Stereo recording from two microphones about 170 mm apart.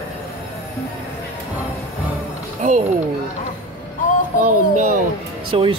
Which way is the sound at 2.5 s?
45° right (ahead or behind).